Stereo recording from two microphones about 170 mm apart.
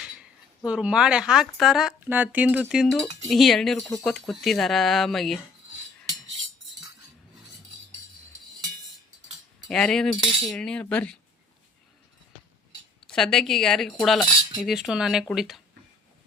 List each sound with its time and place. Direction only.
0.0 s speech: 5° right (ahead or behind)
9.6 s speech: 5° left (ahead or behind)
13.1 s speech: 5° left (ahead or behind)